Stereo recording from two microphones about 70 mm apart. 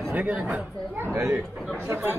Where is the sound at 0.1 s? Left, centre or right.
Right.